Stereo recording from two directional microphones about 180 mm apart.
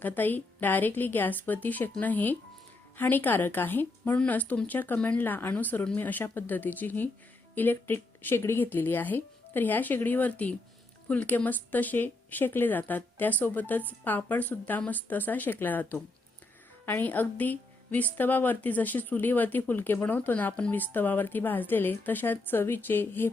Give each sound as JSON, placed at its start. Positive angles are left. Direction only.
{"t": 0.0, "sound": "a woman's voice", "side_deg": 10}